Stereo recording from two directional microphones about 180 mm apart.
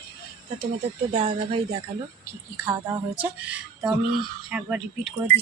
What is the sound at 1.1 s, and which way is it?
Speech, 30° right (ahead or behind).